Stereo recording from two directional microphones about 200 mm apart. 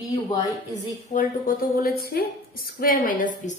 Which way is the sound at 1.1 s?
45° left (ahead or behind).